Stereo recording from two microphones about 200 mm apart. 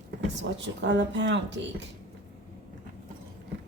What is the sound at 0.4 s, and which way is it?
Speech, 60° right (ahead or behind).